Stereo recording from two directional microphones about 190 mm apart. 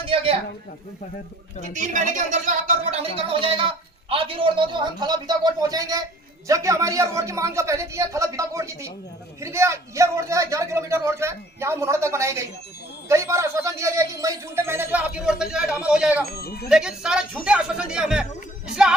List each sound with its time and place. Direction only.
0.1 s a sound: 30° right (ahead or behind)
1.7 s a man's voice: 40° right (ahead or behind); by 16.2 s 5° right (ahead or behind)
16.3 s speech: 55° left (ahead or behind)
16.6 s speech: 5° right (ahead or behind)